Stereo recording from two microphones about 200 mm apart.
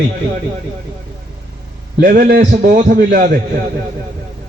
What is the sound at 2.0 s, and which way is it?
A man's voice, 45° right (ahead or behind).